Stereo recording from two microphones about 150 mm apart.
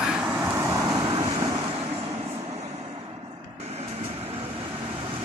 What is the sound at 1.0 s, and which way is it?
Vehicle, 30° right (ahead or behind).